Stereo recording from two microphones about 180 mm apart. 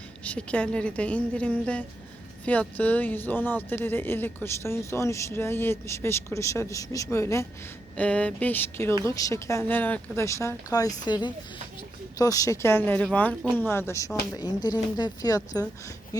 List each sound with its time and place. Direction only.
0.3 s speech: 5° left (ahead or behind)